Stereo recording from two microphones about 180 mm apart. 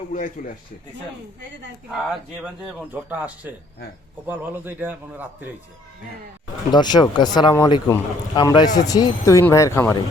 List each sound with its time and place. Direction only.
0.1 s a man's voice: 45° left (ahead or behind)
2.4 s speech: 5° right (ahead or behind)
6.7 s speech: 25° left (ahead or behind)